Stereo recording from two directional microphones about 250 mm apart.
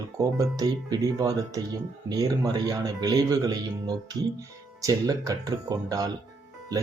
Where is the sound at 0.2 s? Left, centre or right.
Centre.